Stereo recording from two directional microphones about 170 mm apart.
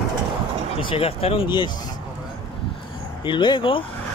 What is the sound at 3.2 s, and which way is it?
Speech, 25° left (ahead or behind).